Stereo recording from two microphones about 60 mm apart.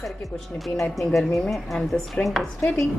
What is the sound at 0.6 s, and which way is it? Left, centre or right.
Dishes, centre.